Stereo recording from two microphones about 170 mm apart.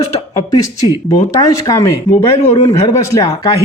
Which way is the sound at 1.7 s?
15° left (ahead or behind).